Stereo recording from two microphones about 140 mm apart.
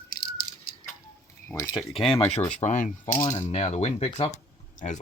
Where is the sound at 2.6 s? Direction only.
60° left (ahead or behind).